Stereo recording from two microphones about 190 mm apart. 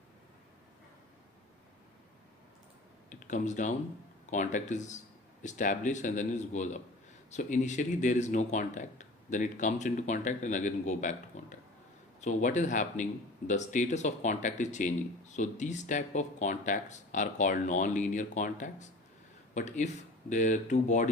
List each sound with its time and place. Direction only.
3.1 s speech: 40° left (ahead or behind)